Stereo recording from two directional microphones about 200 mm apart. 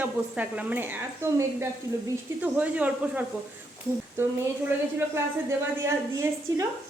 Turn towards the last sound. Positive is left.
turn(degrees=-15)  # may be behind; listen again after turning